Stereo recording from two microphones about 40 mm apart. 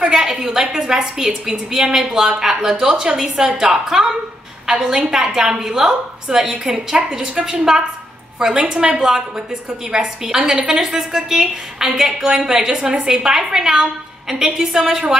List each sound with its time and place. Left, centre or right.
0.1 s a woman's voice: centre